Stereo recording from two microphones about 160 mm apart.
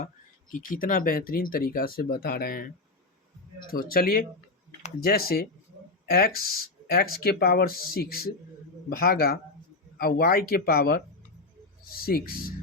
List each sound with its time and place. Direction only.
0.5 s speech: 55° left (ahead or behind)
3.7 s speech: 65° left (ahead or behind)